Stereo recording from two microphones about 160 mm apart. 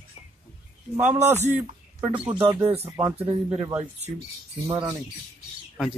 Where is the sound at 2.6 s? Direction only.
40° right (ahead or behind).